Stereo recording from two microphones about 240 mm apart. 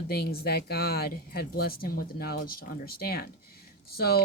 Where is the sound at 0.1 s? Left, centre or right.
Left.